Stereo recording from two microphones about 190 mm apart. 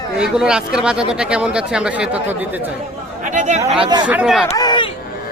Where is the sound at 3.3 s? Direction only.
40° right (ahead or behind).